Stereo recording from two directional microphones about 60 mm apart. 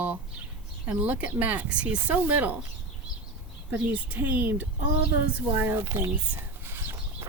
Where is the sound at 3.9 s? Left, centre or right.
Right.